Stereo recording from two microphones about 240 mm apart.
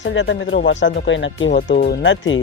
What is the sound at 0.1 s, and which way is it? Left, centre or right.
Speech, left.